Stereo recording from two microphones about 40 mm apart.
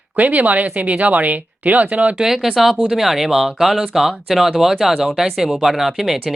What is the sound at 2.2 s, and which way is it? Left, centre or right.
Speech, centre.